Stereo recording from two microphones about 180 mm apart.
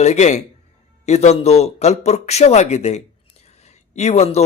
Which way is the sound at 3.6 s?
40° left (ahead or behind).